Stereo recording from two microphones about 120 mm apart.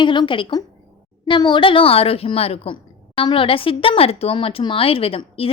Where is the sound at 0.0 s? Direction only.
40° left (ahead or behind).